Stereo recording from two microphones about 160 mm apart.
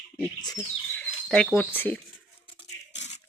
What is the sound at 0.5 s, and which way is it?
Bird, 10° left (ahead or behind).